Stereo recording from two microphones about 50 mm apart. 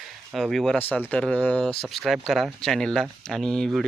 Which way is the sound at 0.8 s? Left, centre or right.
Left.